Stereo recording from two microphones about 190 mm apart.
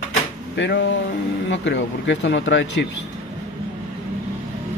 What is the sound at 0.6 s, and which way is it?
Speech, 70° left (ahead or behind).